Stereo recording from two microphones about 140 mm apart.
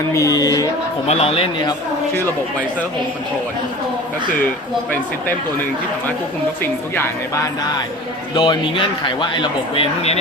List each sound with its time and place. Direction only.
0.1 s speech: 25° left (ahead or behind)
1.0 s speech: 45° left (ahead or behind)
6.6 s speech: 15° left (ahead or behind)
8.4 s speech: 35° left (ahead or behind)